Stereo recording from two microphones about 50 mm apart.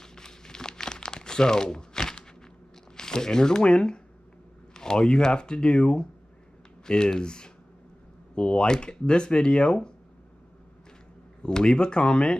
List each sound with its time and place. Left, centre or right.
0.0 s crumpling: centre
3.0 s speech: centre
11.4 s speech: centre